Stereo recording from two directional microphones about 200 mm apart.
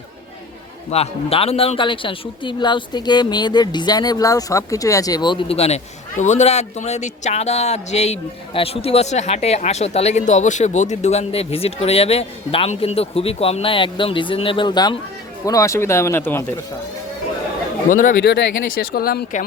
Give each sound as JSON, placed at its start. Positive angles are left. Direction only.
{"t": 0.9, "sound": "speech", "side_deg": 30}
{"t": 17.8, "sound": "speech", "side_deg": 40}